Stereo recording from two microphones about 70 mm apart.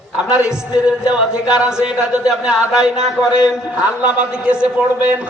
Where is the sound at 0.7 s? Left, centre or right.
Centre.